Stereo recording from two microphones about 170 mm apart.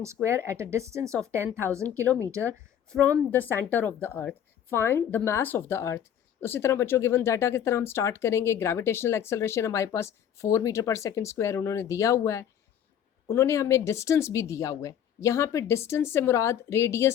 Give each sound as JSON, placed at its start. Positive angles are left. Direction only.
{"t": 0.0, "sound": "speech", "side_deg": -15}
{"t": 3.3, "sound": "speech", "side_deg": 10}